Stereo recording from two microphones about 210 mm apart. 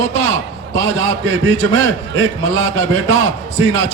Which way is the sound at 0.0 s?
65° right (ahead or behind).